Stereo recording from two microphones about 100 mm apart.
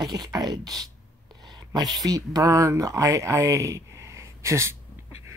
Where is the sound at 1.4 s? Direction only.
45° right (ahead or behind).